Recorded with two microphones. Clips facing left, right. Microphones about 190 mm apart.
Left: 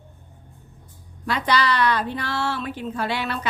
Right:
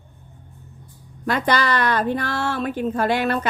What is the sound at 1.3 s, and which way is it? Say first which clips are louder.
A woman's voice: right 2 dB; 50° right (ahead or behind).